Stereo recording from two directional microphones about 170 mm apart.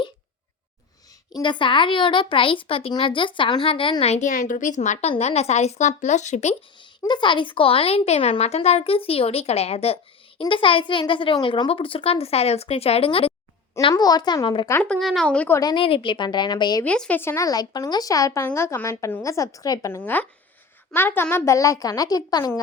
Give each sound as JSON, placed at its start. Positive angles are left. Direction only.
{"t": 1.4, "sound": "speech", "side_deg": 30}
{"t": 7.0, "sound": "speech", "side_deg": 25}
{"t": 13.9, "sound": "a woman's voice", "side_deg": 25}
{"t": 14.7, "sound": "a woman's voice", "side_deg": 10}
{"t": 15.6, "sound": "a woman's voice", "side_deg": 30}
{"t": 16.8, "sound": "a woman's voice", "side_deg": 5}